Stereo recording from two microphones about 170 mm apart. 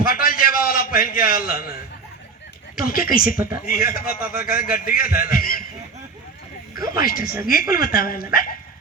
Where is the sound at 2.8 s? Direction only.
60° left (ahead or behind).